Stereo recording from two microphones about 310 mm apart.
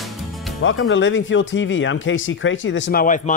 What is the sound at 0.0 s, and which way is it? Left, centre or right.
Music, centre.